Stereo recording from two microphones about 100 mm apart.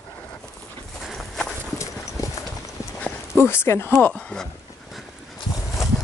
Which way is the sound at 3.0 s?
15° left (ahead or behind).